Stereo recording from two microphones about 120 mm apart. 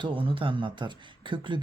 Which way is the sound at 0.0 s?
45° right (ahead or behind).